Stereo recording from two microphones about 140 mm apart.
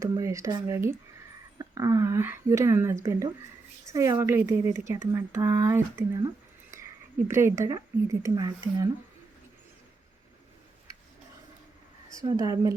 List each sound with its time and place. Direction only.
0.0 s speech: 20° right (ahead or behind)
12.1 s speech: 25° right (ahead or behind)